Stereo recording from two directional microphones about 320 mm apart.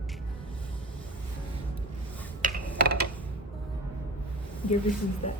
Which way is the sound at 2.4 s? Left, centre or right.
Right.